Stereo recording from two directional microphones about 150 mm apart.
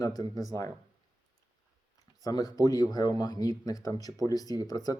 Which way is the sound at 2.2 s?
25° left (ahead or behind).